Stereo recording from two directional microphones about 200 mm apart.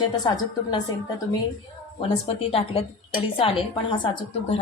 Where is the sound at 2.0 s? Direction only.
30° left (ahead or behind).